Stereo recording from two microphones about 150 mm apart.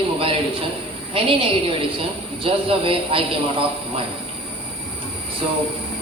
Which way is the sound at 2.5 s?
40° right (ahead or behind).